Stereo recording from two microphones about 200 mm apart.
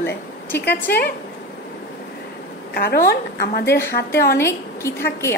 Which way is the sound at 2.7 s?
50° left (ahead or behind).